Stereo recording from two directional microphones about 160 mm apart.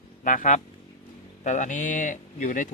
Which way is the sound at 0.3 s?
55° left (ahead or behind).